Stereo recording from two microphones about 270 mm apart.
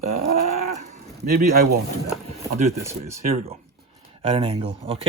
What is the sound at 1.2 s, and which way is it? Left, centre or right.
Speech, right.